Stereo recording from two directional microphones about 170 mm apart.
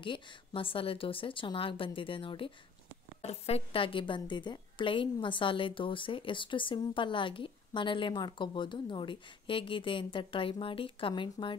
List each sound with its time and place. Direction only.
0.0 s a woman's voice: 30° left (ahead or behind)